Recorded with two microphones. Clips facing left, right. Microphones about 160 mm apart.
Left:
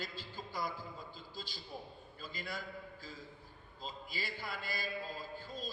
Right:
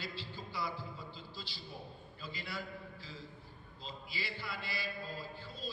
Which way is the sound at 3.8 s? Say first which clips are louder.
Left 1 dB; 45° left (ahead or behind).